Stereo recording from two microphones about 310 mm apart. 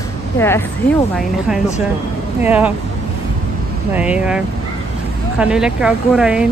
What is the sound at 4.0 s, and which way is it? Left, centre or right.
Speech, centre.